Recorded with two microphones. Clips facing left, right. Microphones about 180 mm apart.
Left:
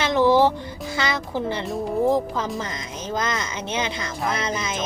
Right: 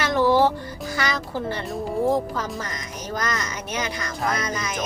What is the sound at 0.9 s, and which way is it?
Speech, 20° left (ahead or behind).